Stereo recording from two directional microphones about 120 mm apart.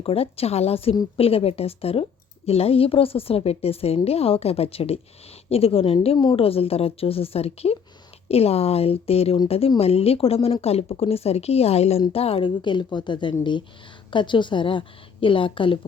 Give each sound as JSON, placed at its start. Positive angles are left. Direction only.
{"t": 0.0, "sound": "a woman's voice", "side_deg": 55}